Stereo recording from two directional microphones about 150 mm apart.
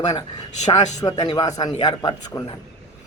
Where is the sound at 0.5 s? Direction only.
50° left (ahead or behind).